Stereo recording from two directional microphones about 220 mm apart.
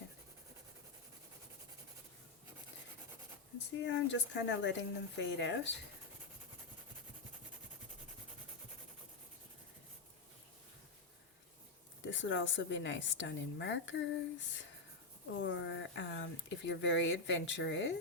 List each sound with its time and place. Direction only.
3.8 s speech: 55° left (ahead or behind)
12.0 s speech: 55° left (ahead or behind)